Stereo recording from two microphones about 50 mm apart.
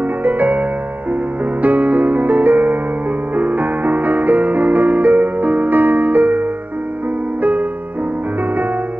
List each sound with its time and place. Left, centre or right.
0.2 s music: right